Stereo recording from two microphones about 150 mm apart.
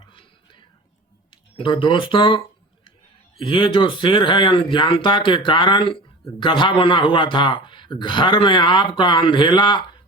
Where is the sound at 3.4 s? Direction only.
35° left (ahead or behind).